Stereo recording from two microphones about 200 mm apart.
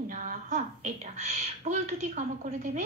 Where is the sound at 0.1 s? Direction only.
40° right (ahead or behind).